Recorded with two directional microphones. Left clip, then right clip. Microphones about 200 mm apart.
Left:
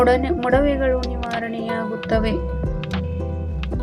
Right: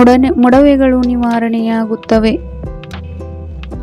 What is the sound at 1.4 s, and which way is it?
Speech, 50° right (ahead or behind).